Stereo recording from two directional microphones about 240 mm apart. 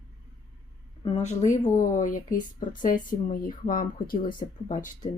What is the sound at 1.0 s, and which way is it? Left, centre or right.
A woman's voice, left.